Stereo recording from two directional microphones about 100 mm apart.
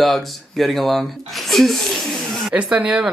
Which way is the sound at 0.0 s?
Centre (ahead or behind).